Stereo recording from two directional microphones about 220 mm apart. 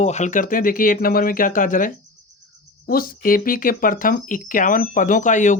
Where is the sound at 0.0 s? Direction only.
30° left (ahead or behind).